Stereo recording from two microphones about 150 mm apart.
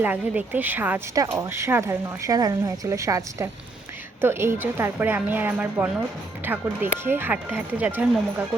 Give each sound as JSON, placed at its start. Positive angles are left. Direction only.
{"t": 0.0, "sound": "a woman's voice", "side_deg": -10}